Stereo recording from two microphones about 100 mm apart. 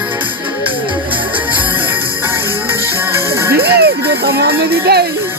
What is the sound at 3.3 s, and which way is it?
Music, 25° right (ahead or behind).